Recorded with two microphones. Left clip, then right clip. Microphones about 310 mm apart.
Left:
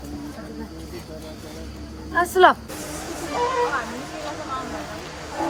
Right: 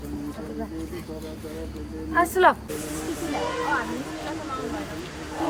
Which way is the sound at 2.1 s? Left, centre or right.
Centre.